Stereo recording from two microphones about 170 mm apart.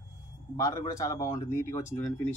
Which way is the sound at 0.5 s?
20° left (ahead or behind).